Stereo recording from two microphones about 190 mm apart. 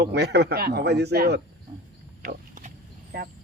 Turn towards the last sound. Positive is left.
turn(degrees=-50)  # may be behind; listen again after turning